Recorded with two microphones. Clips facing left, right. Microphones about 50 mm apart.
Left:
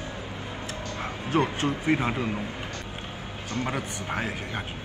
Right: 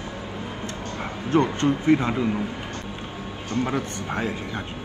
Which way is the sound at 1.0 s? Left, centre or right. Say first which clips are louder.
Right 4 dB; centre.